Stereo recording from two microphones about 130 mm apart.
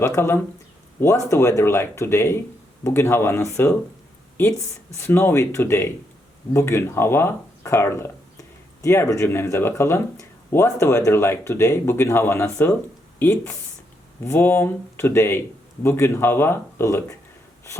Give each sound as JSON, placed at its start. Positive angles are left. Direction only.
{"t": 0.0, "sound": "speech", "side_deg": 20}
{"t": 4.9, "sound": "speech", "side_deg": 20}